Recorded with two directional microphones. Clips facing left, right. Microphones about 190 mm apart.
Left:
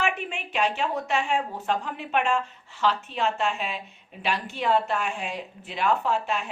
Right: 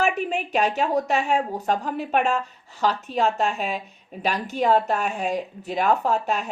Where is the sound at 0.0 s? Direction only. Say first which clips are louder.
Right 6 dB; 40° right (ahead or behind).